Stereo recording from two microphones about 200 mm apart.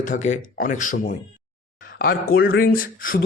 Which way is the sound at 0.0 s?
40° left (ahead or behind).